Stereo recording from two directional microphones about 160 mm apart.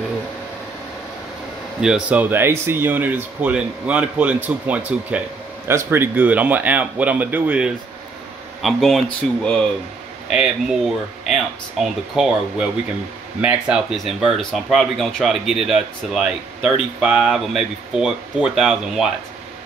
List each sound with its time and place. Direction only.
1.8 s speech: 5° right (ahead or behind)